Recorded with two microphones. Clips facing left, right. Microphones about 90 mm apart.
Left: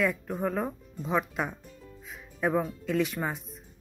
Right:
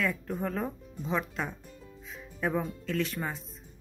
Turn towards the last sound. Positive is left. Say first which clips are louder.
# left 3 dB
turn(degrees=10)  # may be behind; listen again after turning